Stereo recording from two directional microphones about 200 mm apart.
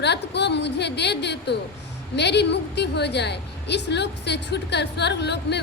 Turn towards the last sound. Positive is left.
turn(degrees=60)  # may be behind; listen again after turning